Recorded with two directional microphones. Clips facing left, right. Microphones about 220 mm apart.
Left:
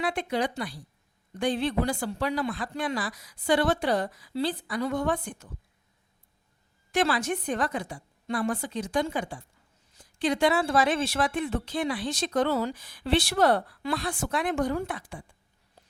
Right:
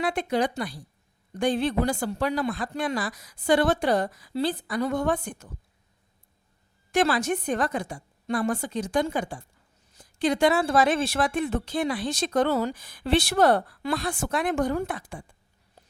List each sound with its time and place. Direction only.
0.0 s speech: 45° right (ahead or behind)
6.9 s speech: 45° right (ahead or behind)